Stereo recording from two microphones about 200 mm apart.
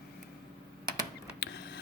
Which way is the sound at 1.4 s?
55° left (ahead or behind).